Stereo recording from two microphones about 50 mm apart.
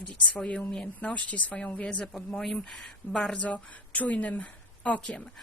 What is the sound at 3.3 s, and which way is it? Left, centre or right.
A woman's voice, left.